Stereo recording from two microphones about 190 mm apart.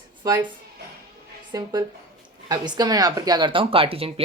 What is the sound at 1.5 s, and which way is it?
Speech, 20° right (ahead or behind).